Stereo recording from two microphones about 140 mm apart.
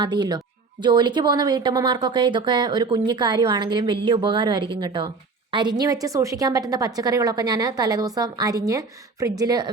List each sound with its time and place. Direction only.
0.0 s a woman's voice: 30° right (ahead or behind)